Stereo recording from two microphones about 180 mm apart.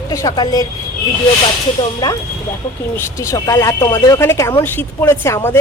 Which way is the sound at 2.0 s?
20° left (ahead or behind).